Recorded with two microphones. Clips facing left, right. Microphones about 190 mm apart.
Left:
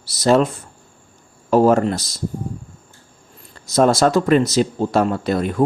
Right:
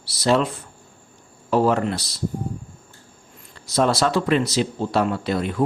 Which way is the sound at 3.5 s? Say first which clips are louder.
Left 5 dB; 45° left (ahead or behind).